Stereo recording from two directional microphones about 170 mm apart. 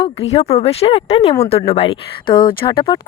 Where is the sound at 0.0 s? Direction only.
35° left (ahead or behind).